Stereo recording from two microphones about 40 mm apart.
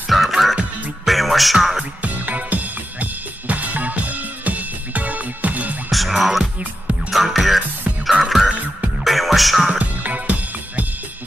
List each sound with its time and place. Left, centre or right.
0.1 s music: centre
2.0 s drum kit: right
5.9 s music: centre
9.7 s music: right